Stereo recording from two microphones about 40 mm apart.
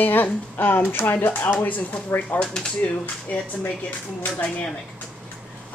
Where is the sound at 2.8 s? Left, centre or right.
Left.